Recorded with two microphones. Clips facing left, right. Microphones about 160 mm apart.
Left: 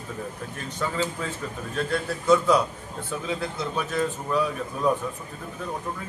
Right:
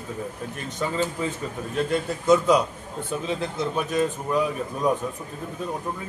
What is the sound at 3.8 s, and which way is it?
A man's voice, 15° right (ahead or behind).